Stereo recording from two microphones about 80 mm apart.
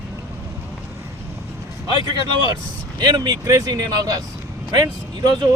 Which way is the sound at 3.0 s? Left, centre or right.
Right.